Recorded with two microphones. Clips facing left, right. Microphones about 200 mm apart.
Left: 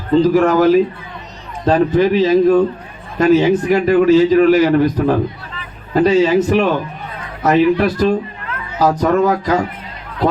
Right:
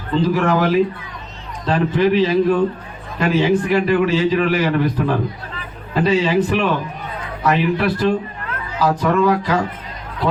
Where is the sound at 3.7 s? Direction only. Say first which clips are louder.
Left 5 dB; 45° left (ahead or behind).